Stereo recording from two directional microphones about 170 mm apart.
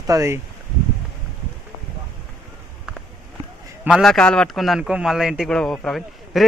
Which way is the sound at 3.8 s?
Centre (ahead or behind).